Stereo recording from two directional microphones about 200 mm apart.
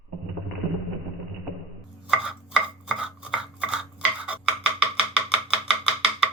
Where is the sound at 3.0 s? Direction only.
5° right (ahead or behind).